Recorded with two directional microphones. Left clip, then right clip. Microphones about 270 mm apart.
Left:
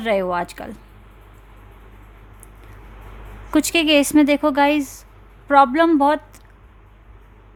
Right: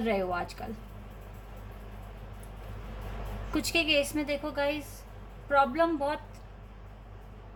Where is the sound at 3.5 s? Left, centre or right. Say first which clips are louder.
Left 11 dB; left.